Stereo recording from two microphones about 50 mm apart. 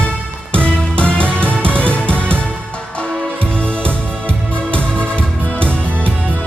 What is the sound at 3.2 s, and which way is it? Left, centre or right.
Music, left.